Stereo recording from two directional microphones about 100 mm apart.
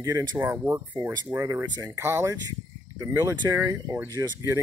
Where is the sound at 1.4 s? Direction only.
35° right (ahead or behind).